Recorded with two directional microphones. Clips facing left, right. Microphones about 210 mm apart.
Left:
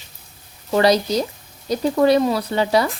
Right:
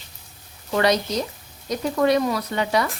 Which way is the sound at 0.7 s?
35° left (ahead or behind).